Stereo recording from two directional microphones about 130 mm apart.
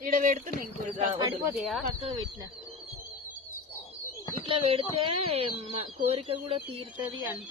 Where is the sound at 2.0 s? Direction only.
40° right (ahead or behind).